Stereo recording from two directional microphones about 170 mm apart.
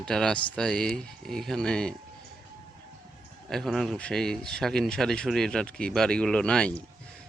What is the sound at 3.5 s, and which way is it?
Speech, centre (ahead or behind).